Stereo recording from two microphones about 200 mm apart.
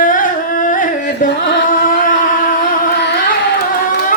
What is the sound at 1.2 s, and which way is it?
Music, 40° left (ahead or behind).